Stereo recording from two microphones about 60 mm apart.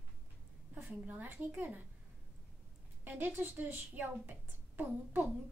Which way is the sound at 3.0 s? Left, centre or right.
Right.